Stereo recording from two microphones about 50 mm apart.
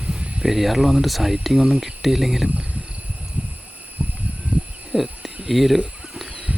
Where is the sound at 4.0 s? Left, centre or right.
Right.